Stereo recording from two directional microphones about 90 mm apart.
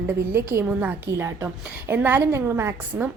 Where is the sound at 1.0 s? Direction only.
35° right (ahead or behind).